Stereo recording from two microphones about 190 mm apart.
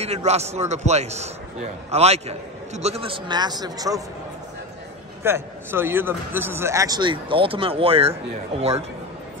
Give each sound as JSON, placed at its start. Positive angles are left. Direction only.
{"t": 0.0, "sound": "a man's voice", "side_deg": -35}
{"t": 5.2, "sound": "a man's voice", "side_deg": -10}